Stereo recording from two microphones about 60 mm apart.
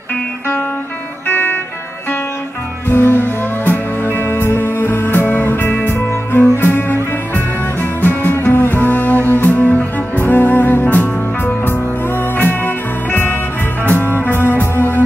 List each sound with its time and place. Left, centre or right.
1.2 s music: left
2.9 s music: left
8.0 s music: left